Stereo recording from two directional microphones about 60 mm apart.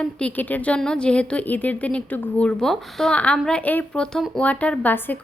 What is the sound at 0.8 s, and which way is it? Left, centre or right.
A woman's voice, centre.